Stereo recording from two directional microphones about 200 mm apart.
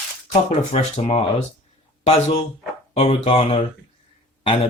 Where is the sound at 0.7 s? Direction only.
35° left (ahead or behind).